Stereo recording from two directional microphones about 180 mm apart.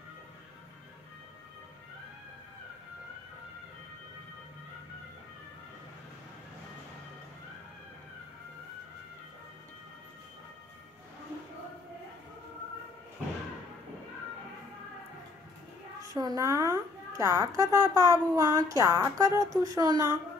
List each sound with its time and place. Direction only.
16.1 s a child's voice: 20° right (ahead or behind)